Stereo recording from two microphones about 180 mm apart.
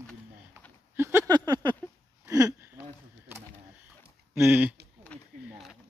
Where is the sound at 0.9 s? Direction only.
15° right (ahead or behind).